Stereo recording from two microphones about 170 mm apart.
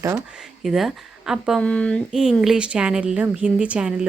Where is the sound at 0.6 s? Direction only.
Centre (ahead or behind).